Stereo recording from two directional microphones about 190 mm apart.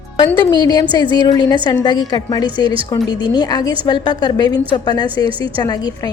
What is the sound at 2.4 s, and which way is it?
Speech, 25° right (ahead or behind).